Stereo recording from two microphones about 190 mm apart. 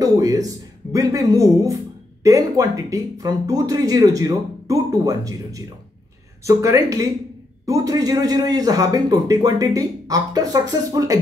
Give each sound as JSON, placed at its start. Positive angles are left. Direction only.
{"t": 0.0, "sound": "a man's voice", "side_deg": -20}